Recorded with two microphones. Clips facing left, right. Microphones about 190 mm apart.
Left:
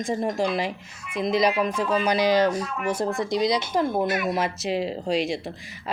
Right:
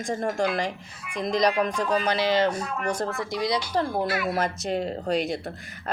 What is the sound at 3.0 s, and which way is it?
Speech, 25° left (ahead or behind).